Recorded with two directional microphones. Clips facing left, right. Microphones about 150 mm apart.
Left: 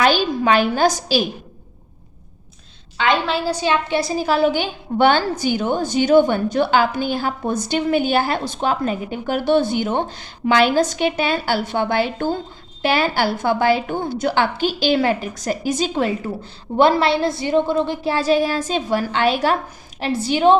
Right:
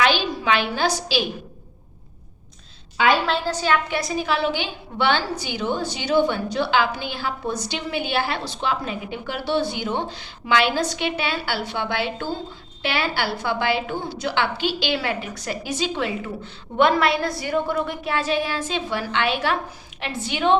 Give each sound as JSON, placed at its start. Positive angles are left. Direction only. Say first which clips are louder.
{"t": 0.0, "sound": "a woman's voice", "louder": "left 4 dB", "side_deg": 45}
{"t": 3.0, "sound": "a woman's voice", "louder": "even", "side_deg": -5}
{"t": 3.3, "sound": "a woman's voice", "louder": "left 2 dB", "side_deg": 10}
{"t": 3.8, "sound": "a woman's voice", "louder": "left 5 dB", "side_deg": 30}